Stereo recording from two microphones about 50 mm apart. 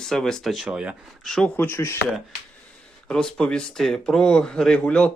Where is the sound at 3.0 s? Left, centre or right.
Centre.